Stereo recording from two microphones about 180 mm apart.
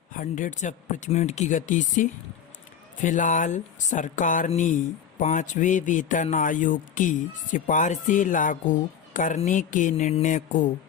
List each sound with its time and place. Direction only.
0.1 s a man's voice: 45° left (ahead or behind)